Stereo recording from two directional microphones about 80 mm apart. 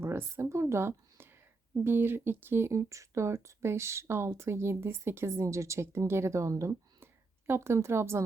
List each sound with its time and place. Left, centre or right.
0.0 s speech: right